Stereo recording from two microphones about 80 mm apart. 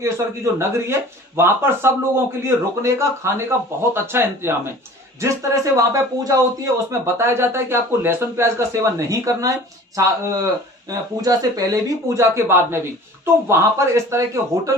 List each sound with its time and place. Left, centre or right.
0.6 s speech: right
5.2 s speech: right
7.0 s speech: right